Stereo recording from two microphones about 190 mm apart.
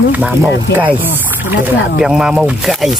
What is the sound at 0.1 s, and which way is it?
Speech, 10° right (ahead or behind).